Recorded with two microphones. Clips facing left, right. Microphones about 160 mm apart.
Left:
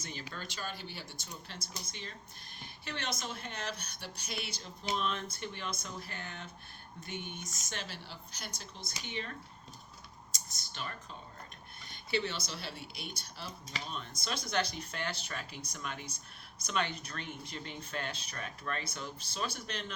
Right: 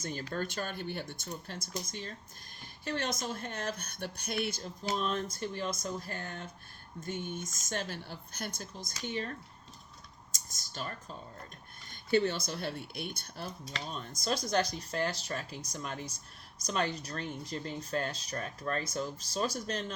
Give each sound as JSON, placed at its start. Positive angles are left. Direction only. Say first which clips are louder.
{"t": 0.0, "sound": "speech", "louder": "right 8 dB", "side_deg": -45}
{"t": 10.3, "sound": "a sound", "louder": "right 4 dB", "side_deg": -45}
{"t": 11.9, "sound": "speech", "louder": "right 7 dB", "side_deg": -45}
{"t": 13.9, "sound": "speech", "louder": "right 7 dB", "side_deg": -40}